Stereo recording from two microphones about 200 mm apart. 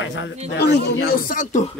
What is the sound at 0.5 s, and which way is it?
Speech, 55° left (ahead or behind).